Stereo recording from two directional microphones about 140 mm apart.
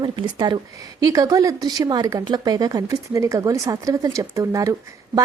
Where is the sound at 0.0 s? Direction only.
30° right (ahead or behind).